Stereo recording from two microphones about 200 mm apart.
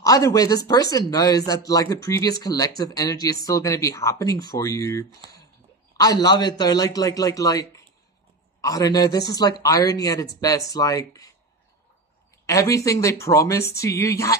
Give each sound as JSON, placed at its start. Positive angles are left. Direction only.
{"t": 0.0, "sound": "speech", "side_deg": 15}
{"t": 5.2, "sound": "speech", "side_deg": -30}
{"t": 5.9, "sound": "speech", "side_deg": 20}
{"t": 12.4, "sound": "speech", "side_deg": 15}